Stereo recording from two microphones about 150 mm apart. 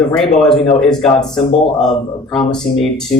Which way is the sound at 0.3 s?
5° left (ahead or behind).